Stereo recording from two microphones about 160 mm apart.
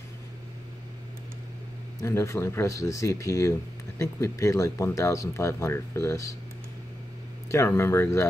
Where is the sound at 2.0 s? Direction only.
15° left (ahead or behind).